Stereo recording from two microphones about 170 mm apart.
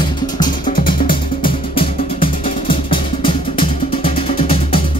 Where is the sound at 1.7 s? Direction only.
30° left (ahead or behind).